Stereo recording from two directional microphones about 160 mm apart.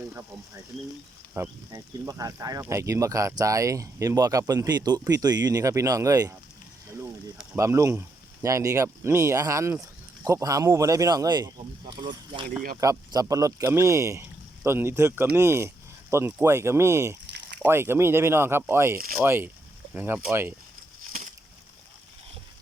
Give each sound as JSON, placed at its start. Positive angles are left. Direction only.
{"t": 1.3, "sound": "speech", "side_deg": -20}
{"t": 7.5, "sound": "speech", "side_deg": -20}